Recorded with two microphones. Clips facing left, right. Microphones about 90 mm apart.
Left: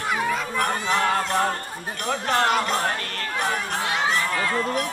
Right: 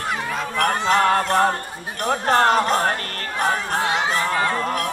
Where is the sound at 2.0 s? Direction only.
40° right (ahead or behind).